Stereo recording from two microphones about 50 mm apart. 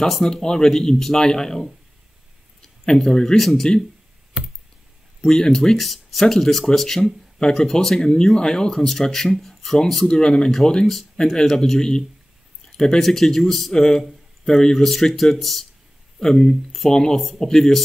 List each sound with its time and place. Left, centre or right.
0.0 s a man's voice: centre
2.6 s speech: centre
5.2 s a man's voice: centre
10.0 s a man's voice: centre